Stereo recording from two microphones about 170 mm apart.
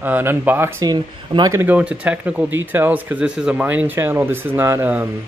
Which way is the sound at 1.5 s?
10° right (ahead or behind).